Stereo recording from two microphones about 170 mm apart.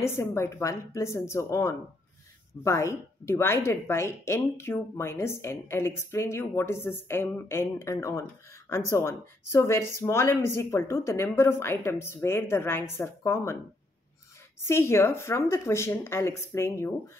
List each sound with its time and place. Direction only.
0.0 s speech: 15° left (ahead or behind)
14.6 s speech: 15° left (ahead or behind)